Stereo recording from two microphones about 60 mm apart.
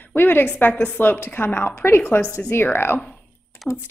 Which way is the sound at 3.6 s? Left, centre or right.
Centre.